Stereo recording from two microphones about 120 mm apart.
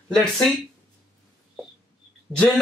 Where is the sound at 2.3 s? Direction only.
20° right (ahead or behind).